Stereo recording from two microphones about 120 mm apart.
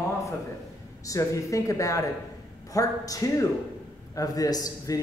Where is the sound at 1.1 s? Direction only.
25° left (ahead or behind).